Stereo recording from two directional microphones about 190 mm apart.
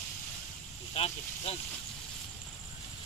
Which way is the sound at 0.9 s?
30° left (ahead or behind).